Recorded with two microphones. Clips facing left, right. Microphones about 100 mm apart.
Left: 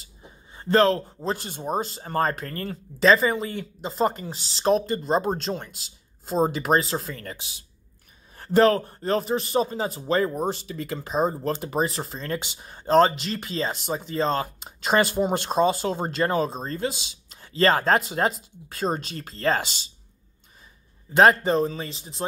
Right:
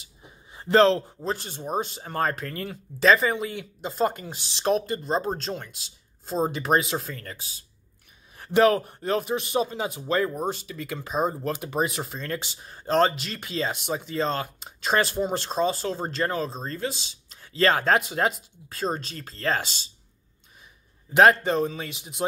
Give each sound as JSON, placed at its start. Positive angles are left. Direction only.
{"t": 0.2, "sound": "a sound", "side_deg": -15}
{"t": 1.2, "sound": "speech", "side_deg": 5}
{"t": 8.5, "sound": "speech", "side_deg": -10}
{"t": 18.8, "sound": "speech", "side_deg": 20}
{"t": 21.2, "sound": "speech", "side_deg": 0}